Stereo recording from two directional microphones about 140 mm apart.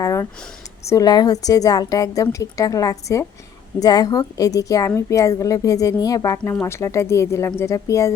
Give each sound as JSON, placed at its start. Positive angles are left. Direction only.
{"t": 0.0, "sound": "a woman's voice", "side_deg": 20}
{"t": 6.4, "sound": "a woman's voice", "side_deg": 15}